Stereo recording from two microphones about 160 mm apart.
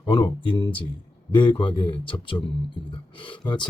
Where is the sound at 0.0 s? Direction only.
30° left (ahead or behind).